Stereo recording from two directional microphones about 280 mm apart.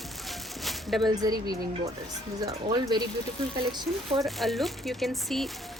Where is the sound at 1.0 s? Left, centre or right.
Centre.